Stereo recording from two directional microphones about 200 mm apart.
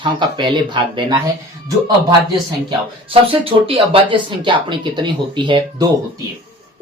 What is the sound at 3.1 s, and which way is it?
Speech, 25° right (ahead or behind).